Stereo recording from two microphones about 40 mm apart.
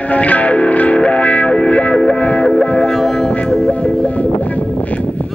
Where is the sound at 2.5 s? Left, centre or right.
Centre.